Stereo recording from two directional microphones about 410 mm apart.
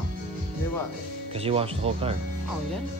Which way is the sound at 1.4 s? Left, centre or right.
Centre.